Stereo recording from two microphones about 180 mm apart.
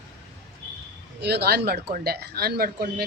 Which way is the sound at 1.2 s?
65° right (ahead or behind).